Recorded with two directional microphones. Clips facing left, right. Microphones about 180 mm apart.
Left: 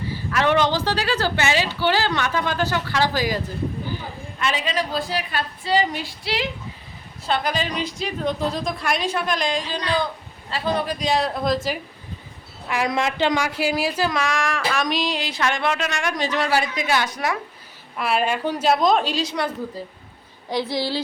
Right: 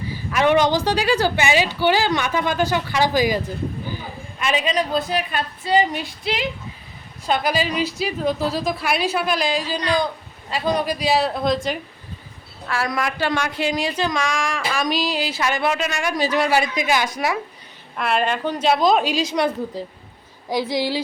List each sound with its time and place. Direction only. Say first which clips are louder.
0.1 s a woman's voice: right 3 dB; 15° right (ahead or behind); by 11.8 s 5° left (ahead or behind)
12.6 s a woman's voice: left 1 dB; 15° left (ahead or behind); by 17.3 s 10° right (ahead or behind)
17.9 s a woman's voice: right 1 dB; 5° left (ahead or behind)
20.5 s a woman's voice: right 2 dB; 15° right (ahead or behind)